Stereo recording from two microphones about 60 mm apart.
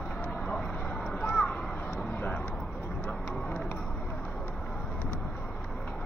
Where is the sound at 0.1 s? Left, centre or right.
Left.